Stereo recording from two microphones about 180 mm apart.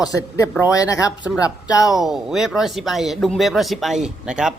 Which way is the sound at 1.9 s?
Centre (ahead or behind).